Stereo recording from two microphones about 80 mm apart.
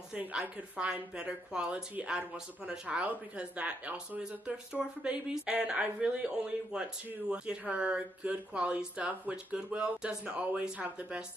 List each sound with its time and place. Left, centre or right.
0.1 s a woman's voice: centre